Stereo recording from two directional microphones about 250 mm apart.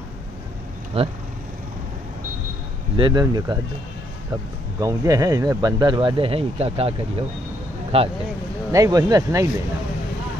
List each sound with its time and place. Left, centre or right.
1.0 s speech: right
3.0 s speech: centre
4.7 s speech: centre